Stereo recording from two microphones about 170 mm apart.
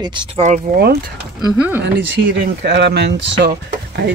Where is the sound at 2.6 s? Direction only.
90° right.